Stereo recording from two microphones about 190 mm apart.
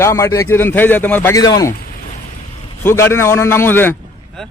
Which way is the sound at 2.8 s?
15° left (ahead or behind).